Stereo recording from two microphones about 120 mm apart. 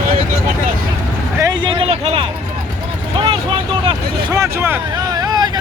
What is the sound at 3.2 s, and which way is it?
Vehicle, 45° right (ahead or behind).